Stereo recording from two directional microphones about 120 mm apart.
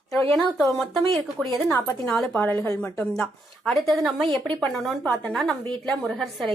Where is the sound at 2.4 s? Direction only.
15° left (ahead or behind).